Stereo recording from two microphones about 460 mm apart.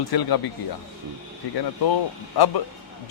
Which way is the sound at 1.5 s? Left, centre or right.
Left.